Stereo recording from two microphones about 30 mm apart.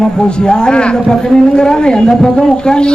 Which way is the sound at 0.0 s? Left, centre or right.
Left.